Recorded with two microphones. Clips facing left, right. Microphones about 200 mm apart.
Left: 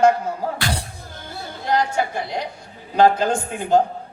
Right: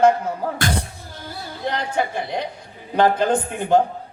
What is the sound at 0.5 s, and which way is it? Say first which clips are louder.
Music: right 2 dB; 50° right (ahead or behind).